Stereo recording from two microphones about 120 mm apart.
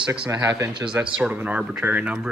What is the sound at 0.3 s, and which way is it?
Speech, 25° right (ahead or behind).